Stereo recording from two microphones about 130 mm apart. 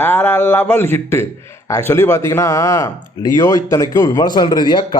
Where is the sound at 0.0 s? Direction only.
15° left (ahead or behind).